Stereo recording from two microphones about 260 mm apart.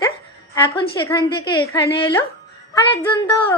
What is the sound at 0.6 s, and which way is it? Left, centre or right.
A woman's voice, centre.